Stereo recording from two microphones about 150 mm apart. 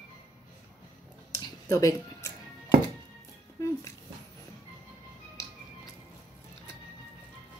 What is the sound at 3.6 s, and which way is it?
Dog, 20° left (ahead or behind).